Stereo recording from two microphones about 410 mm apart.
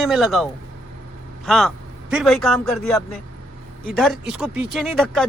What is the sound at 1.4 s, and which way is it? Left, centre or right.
A man's voice, centre.